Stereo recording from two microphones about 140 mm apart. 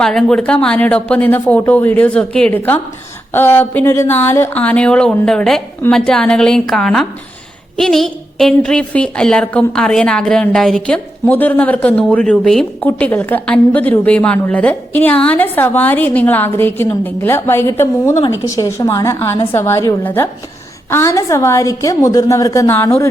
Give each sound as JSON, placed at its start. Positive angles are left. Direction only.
{"t": 0.0, "sound": "a woman's voice", "side_deg": 5}